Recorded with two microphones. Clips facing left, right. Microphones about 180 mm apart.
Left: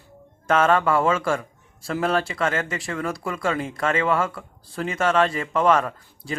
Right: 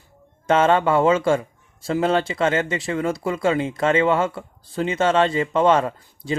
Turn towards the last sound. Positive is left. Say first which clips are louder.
# right 5 dB
turn(degrees=-25)  # may be behind; listen again after turning